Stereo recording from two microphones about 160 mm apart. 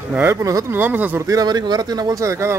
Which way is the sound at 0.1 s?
15° right (ahead or behind).